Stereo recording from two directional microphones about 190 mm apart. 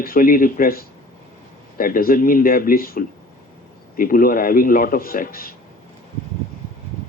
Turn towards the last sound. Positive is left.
turn(degrees=50)  # may be behind; listen again after turning